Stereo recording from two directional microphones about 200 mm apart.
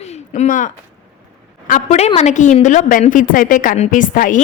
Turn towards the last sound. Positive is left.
turn(degrees=40)  # may be behind; listen again after turning